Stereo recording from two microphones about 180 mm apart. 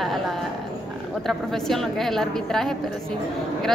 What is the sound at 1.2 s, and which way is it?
A woman's voice, centre (ahead or behind).